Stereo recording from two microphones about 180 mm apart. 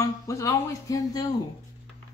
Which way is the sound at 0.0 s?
15° left (ahead or behind).